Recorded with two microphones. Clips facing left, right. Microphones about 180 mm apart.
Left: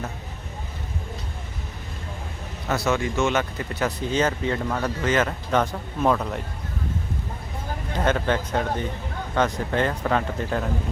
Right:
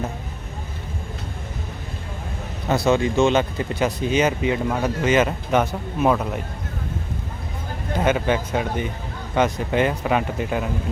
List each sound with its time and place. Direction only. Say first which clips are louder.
2.6 s speech: right 5 dB; 15° right (ahead or behind)
2.9 s speech: right 6 dB; 30° right (ahead or behind)
3.8 s speech: right 3 dB; 15° right (ahead or behind)
7.9 s speech: right 3 dB; 10° right (ahead or behind)